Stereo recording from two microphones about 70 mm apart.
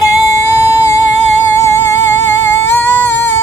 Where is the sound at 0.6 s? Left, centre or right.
Left.